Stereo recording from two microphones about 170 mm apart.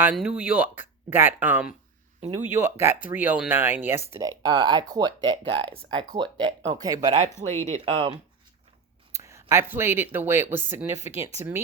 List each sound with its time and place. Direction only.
0.0 s speech: 5° right (ahead or behind)
2.2 s speech: 45° right (ahead or behind)
2.6 s speech: 15° right (ahead or behind)
7.4 s speech: 40° right (ahead or behind)
9.1 s speech: 15° right (ahead or behind)